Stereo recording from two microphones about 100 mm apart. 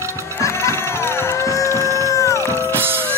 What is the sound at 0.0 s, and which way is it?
Music, 30° right (ahead or behind).